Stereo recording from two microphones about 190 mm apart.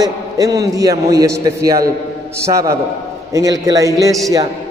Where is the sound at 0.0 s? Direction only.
20° right (ahead or behind).